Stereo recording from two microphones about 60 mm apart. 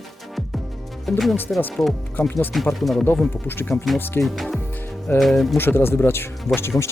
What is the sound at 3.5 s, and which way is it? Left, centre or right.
Speech, left.